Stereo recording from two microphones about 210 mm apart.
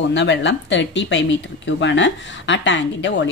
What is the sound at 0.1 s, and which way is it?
Speech, 60° left (ahead or behind).